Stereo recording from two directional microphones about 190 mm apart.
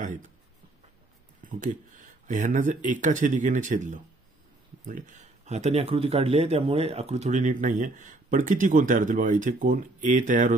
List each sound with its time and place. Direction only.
1.5 s speech: 45° right (ahead or behind)